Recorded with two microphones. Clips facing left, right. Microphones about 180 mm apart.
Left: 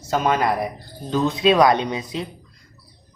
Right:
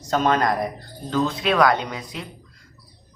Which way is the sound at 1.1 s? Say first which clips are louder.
Left 4 dB; 20° left (ahead or behind).